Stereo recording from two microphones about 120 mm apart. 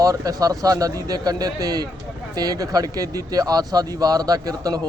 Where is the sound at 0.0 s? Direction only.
30° right (ahead or behind).